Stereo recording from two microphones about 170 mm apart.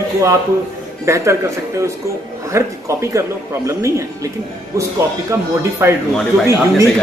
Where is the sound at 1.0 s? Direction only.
15° right (ahead or behind).